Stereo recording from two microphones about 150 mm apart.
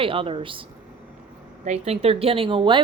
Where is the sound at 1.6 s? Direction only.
45° right (ahead or behind).